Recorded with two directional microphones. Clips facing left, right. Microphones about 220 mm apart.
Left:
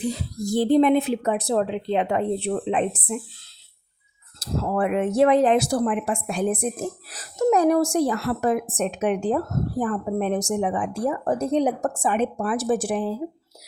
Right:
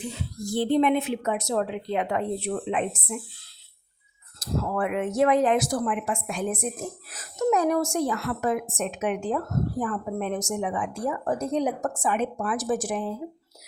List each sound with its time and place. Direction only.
0.0 s speech: 35° left (ahead or behind)
4.4 s speech: 30° left (ahead or behind)